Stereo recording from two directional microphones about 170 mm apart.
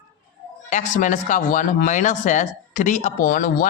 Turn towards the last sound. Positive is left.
turn(degrees=55)  # may be behind; listen again after turning